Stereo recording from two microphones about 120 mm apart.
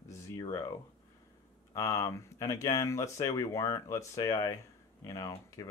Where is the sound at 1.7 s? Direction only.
25° left (ahead or behind).